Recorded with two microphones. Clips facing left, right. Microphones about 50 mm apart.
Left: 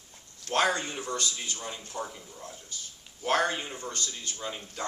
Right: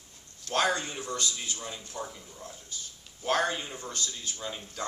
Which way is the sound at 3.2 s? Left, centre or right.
Left.